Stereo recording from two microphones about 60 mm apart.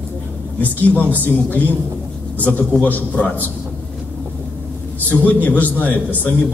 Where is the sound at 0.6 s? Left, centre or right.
Left.